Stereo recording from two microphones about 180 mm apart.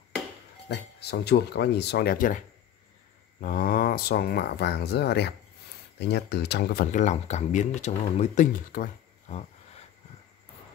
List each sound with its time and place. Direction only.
0.7 s speech: 65° left (ahead or behind); by 9.8 s 35° left (ahead or behind)